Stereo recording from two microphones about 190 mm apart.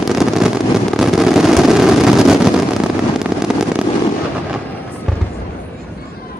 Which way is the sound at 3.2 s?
5° right (ahead or behind).